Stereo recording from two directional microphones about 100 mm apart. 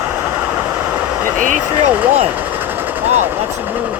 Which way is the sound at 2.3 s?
20° right (ahead or behind).